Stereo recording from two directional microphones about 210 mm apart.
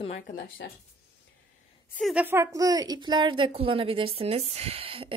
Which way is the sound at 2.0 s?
Centre (ahead or behind).